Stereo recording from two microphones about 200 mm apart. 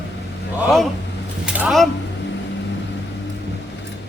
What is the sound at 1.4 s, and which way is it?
Speech, 5° right (ahead or behind).